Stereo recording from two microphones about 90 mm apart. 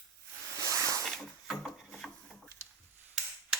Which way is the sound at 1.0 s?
Centre (ahead or behind).